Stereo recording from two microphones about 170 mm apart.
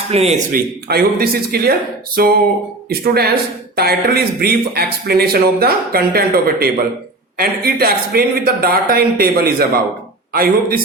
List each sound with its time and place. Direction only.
0.1 s speech: 40° right (ahead or behind)
0.5 s speech: 65° right (ahead or behind)